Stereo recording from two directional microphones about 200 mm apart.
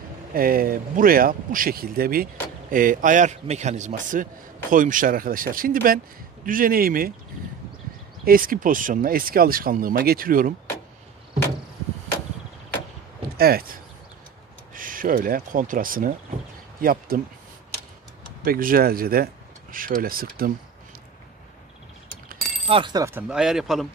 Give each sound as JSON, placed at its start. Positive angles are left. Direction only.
{"t": 0.3, "sound": "a man's voice", "side_deg": -45}
{"t": 8.3, "sound": "a man's voice", "side_deg": -45}
{"t": 13.4, "sound": "a man's voice", "side_deg": -50}
{"t": 18.4, "sound": "speech", "side_deg": -45}
{"t": 22.7, "sound": "speech", "side_deg": -25}